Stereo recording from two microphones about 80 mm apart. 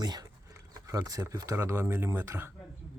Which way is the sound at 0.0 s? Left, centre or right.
Right.